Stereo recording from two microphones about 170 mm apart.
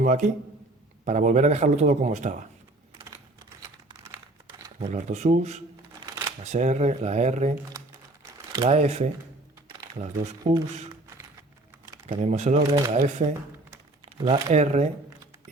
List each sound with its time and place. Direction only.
0.0 s a man's voice: 45° right (ahead or behind)
3.6 s crumpling: 20° right (ahead or behind)
4.8 s speech: 45° right (ahead or behind)
6.0 s shuffling cards: 25° right (ahead or behind)
6.4 s a man's voice: 45° right (ahead or behind)
8.6 s speech: 40° right (ahead or behind)
10.5 s speech: 40° right (ahead or behind)
12.0 s a man's voice: 40° right (ahead or behind)